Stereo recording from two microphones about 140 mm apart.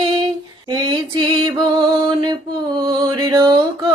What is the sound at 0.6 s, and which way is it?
Music, 30° right (ahead or behind).